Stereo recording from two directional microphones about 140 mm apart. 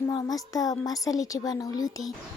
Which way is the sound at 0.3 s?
25° left (ahead or behind).